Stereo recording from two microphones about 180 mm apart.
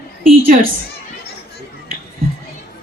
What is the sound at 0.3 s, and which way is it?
Speech, 50° right (ahead or behind).